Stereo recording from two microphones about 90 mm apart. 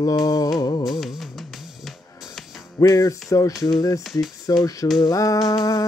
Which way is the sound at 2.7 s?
40° left (ahead or behind).